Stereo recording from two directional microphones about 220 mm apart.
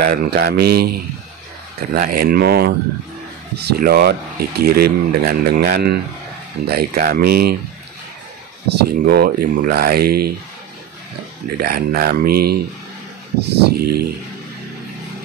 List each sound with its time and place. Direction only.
0.0 s speech: 45° right (ahead or behind)
2.0 s speech: 40° right (ahead or behind)
8.6 s speech: 45° right (ahead or behind)
11.6 s speech: 45° right (ahead or behind)